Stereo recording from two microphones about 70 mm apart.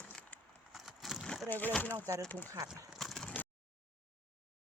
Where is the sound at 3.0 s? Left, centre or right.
Centre.